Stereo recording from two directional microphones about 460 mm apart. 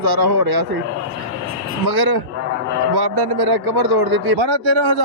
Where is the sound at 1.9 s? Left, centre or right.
Right.